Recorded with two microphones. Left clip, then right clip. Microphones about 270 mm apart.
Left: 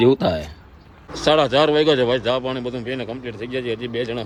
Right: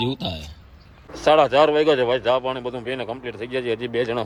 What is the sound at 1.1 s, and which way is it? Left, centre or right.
A man's voice, centre.